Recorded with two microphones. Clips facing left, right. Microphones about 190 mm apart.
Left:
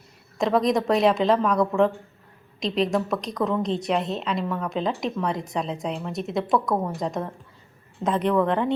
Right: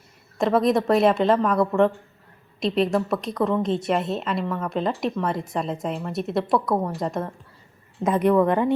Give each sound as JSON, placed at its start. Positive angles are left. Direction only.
{"t": 0.3, "sound": "a woman's voice", "side_deg": -5}